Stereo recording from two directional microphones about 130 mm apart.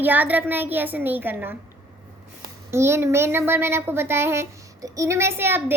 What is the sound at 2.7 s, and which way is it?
A child's voice, 20° right (ahead or behind).